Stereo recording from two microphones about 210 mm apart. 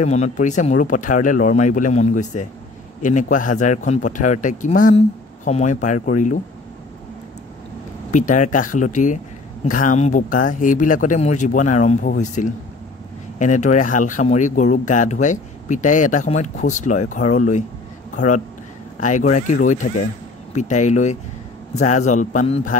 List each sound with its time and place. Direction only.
0.0 s speech: 35° left (ahead or behind)
8.1 s a man's voice: 35° left (ahead or behind)